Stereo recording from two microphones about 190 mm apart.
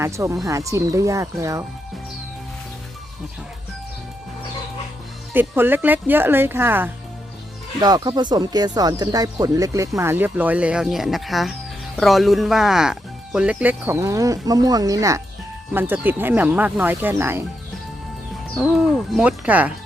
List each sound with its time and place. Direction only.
0.0 s speech: 15° right (ahead or behind)
5.3 s speech: 10° right (ahead or behind)
18.5 s speech: centre (ahead or behind)